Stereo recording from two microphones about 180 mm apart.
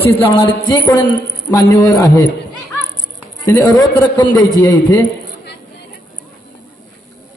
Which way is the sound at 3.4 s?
20° left (ahead or behind).